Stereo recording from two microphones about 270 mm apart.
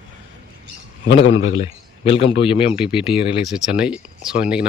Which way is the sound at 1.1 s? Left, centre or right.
Left.